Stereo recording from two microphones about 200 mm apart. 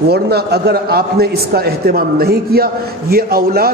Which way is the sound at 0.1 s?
55° right (ahead or behind).